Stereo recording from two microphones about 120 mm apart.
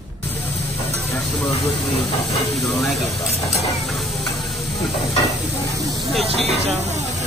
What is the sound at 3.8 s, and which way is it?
Hiss, centre (ahead or behind).